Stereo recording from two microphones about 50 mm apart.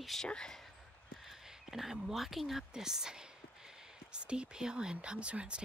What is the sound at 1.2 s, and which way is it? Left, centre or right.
Speech, centre.